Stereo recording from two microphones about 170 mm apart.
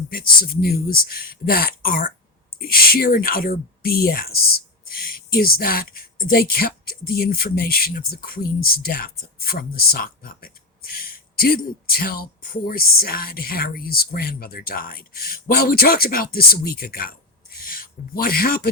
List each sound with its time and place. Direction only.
0.1 s speech: 60° left (ahead or behind)